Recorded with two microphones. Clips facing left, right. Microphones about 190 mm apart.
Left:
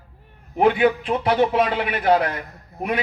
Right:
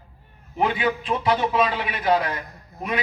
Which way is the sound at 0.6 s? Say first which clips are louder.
Left 6 dB; 60° left (ahead or behind).